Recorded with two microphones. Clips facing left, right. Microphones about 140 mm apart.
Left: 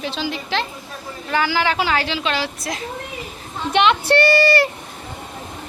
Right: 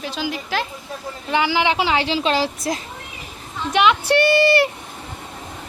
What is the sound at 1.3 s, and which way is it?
Speech, 20° right (ahead or behind).